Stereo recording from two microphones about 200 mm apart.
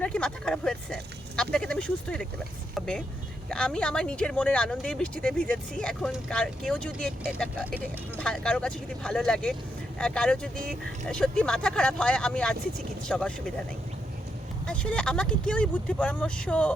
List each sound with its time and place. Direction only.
0.0 s speech: 5° left (ahead or behind)
14.7 s speech: 5° left (ahead or behind)